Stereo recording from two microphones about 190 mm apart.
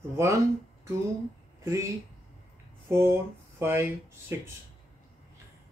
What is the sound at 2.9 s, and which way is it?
Speech, 15° right (ahead or behind).